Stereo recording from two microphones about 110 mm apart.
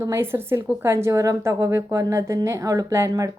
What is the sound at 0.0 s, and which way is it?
A woman's voice, 25° right (ahead or behind).